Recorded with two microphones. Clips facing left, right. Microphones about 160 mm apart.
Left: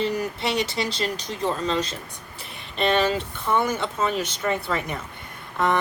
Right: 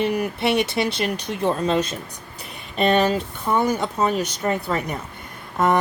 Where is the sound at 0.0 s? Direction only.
60° right (ahead or behind).